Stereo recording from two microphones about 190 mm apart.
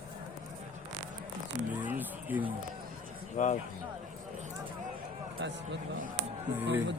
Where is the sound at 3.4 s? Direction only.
45° left (ahead or behind).